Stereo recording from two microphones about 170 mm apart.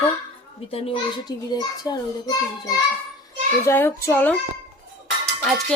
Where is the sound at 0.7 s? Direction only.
30° left (ahead or behind).